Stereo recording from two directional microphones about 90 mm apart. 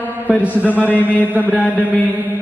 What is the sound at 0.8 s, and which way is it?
Speech, 20° left (ahead or behind).